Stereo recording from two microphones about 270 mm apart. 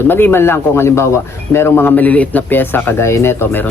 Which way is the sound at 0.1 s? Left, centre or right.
Centre.